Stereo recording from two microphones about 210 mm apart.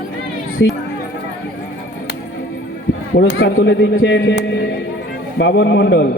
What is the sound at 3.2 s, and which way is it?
Speech, 60° left (ahead or behind).